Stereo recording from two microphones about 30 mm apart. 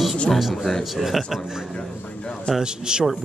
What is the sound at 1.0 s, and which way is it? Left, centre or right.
Speech, centre.